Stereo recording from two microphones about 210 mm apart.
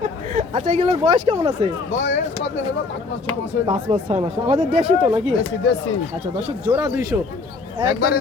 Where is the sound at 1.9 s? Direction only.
60° left (ahead or behind).